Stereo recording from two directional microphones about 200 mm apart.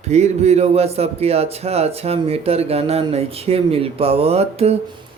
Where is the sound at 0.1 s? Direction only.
35° right (ahead or behind).